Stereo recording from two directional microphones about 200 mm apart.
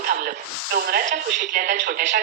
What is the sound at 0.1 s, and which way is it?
A woman's voice, 45° right (ahead or behind).